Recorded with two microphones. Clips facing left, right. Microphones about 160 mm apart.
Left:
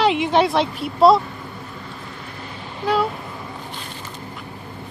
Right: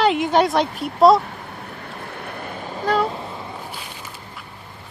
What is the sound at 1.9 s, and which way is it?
Vehicle, 60° right (ahead or behind).